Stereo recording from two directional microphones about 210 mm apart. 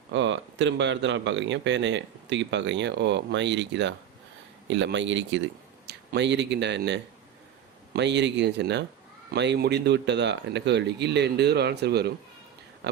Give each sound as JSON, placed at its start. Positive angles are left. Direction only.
{"t": 0.1, "sound": "speech", "side_deg": -60}